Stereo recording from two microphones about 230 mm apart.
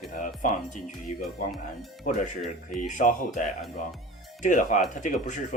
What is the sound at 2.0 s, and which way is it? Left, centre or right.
Speech, left.